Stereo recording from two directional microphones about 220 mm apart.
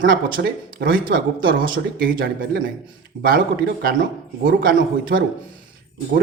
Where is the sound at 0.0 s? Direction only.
40° right (ahead or behind).